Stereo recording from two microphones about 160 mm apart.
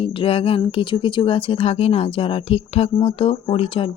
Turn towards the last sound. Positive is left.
turn(degrees=35)  # may be behind; listen again after turning